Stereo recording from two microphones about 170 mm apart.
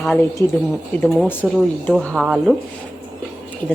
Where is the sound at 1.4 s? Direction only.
Centre (ahead or behind).